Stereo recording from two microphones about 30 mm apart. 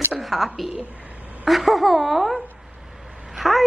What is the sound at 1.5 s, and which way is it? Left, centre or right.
Speech, centre.